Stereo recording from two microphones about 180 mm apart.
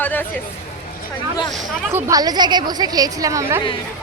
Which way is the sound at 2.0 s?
20° right (ahead or behind).